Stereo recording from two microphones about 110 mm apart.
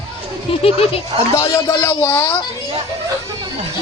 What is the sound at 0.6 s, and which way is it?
Speech, 60° left (ahead or behind).